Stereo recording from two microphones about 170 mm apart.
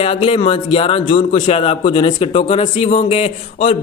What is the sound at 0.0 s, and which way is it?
A man's voice, 35° left (ahead or behind).